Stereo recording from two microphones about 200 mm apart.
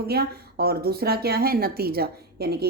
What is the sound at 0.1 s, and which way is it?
Speech, 50° right (ahead or behind).